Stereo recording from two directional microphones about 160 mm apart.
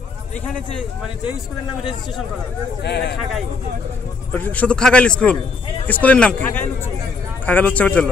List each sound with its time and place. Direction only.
2.8 s speech: 90° left
4.3 s a man's voice: 10° left (ahead or behind)